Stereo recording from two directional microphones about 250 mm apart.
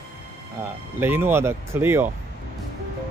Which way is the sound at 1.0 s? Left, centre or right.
Centre.